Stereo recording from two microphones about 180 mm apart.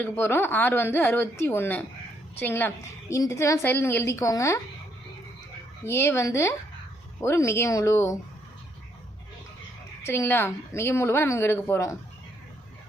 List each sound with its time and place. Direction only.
0.0 s a woman's voice: 10° left (ahead or behind)
5.8 s a woman's voice: 15° left (ahead or behind)
10.1 s a woman's voice: 15° left (ahead or behind)